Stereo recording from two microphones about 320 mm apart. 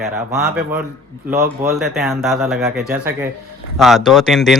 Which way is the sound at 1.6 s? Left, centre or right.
Centre.